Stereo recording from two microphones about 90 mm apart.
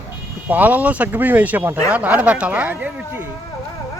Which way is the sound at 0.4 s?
20° right (ahead or behind).